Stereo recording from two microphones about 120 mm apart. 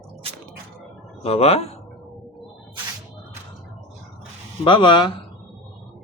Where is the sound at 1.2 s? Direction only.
60° left (ahead or behind).